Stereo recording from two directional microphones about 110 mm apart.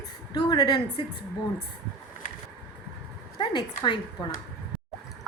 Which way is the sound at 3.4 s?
45° left (ahead or behind).